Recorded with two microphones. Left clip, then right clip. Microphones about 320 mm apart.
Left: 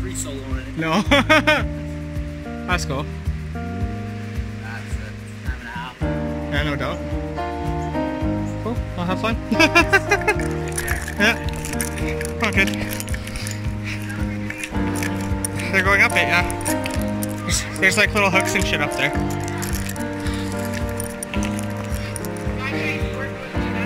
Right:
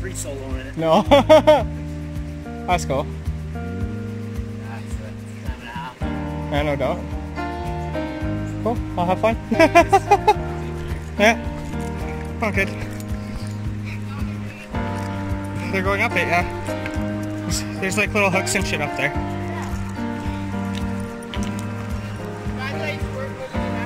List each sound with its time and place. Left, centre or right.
0.7 s speech: centre
2.7 s speech: centre
6.5 s speech: right
8.9 s speech: right
12.4 s speech: centre
15.7 s speech: centre
17.5 s speech: centre